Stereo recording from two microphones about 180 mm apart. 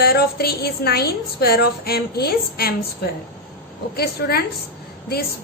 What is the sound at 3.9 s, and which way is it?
Speech, 60° left (ahead or behind).